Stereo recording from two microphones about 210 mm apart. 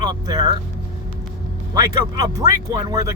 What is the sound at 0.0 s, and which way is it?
Speech, 20° right (ahead or behind).